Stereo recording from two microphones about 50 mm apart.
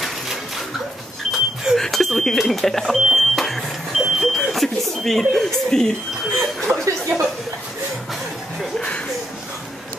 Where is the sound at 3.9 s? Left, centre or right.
Centre.